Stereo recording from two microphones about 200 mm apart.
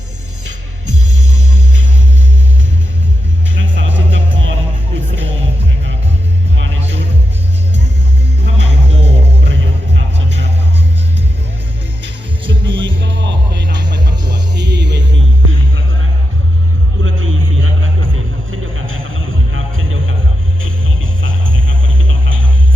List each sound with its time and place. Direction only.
3.5 s music: 70° right (ahead or behind)
8.4 s music: 65° right (ahead or behind)
12.5 s music: 25° right (ahead or behind)
13.0 s music: 65° right (ahead or behind)
17.0 s music: 80° right